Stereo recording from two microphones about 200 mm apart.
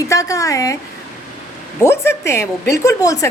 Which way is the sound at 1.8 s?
15° left (ahead or behind).